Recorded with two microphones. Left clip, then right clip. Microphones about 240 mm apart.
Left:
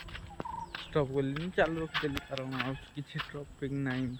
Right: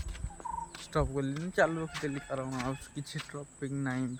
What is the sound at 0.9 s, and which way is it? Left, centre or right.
Speech, right.